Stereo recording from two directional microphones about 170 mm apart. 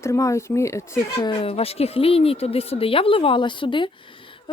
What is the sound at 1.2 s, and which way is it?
Speech, 30° left (ahead or behind).